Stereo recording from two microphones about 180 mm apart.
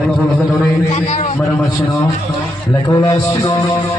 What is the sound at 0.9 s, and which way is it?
Speech, 40° left (ahead or behind).